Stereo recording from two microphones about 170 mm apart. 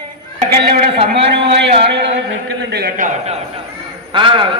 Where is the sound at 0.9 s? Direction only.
30° right (ahead or behind).